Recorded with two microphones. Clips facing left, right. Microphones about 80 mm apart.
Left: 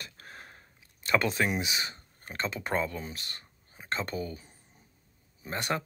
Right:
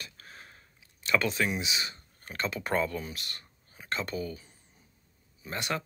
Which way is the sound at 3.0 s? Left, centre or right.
Left.